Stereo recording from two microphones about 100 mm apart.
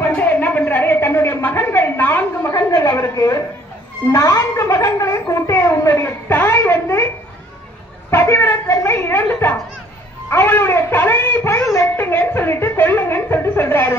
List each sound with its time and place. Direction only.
0.0 s a sound: 20° left (ahead or behind)
2.5 s a woman's voice: 35° left (ahead or behind)
8.1 s speech: 25° left (ahead or behind)